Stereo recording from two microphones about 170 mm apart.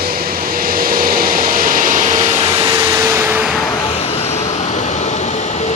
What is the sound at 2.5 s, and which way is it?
Vehicle, 20° right (ahead or behind).